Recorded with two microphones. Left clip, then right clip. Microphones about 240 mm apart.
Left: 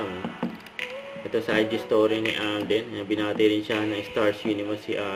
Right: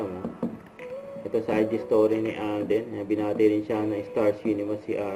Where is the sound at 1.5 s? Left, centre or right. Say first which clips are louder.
Left 1 dB; left.